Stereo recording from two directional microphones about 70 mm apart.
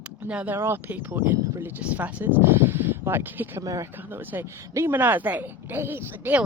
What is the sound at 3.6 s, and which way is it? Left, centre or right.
Speech, right.